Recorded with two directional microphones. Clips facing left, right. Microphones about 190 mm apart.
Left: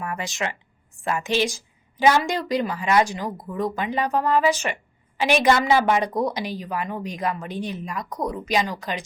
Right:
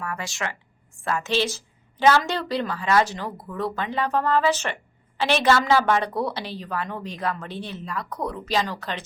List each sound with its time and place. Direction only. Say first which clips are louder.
0.0 s a woman's voice: left 2 dB; 20° left (ahead or behind)